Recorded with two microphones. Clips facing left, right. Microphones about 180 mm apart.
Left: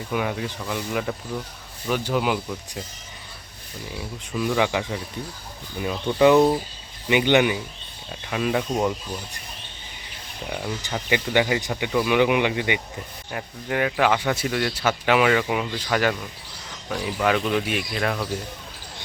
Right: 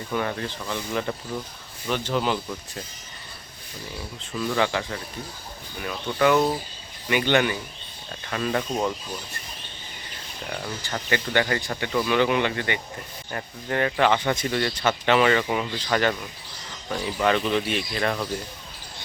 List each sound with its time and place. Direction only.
0.1 s speech: 10° left (ahead or behind)
4.4 s speech: 10° left (ahead or behind)
10.4 s speech: 10° left (ahead or behind)